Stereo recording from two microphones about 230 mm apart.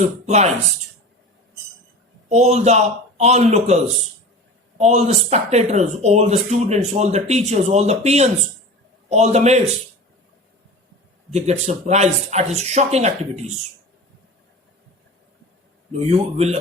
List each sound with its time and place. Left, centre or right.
0.3 s speech: right
2.3 s speech: right
11.3 s speech: right
15.9 s speech: right